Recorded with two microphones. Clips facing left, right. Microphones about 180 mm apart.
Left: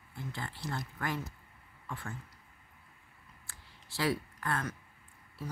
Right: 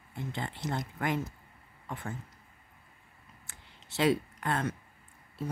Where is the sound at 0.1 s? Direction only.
20° right (ahead or behind).